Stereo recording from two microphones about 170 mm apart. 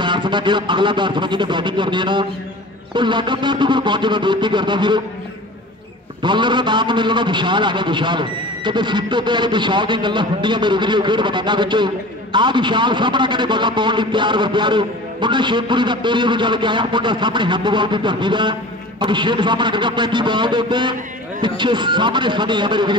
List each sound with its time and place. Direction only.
0.0 s a man's voice: 25° right (ahead or behind)
6.2 s a man's voice: 25° right (ahead or behind)